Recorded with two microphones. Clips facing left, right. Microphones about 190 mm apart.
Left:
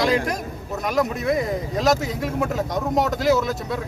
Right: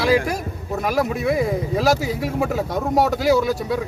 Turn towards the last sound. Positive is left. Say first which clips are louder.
# right 2 dB
turn(degrees=-10)  # may be behind; listen again after turning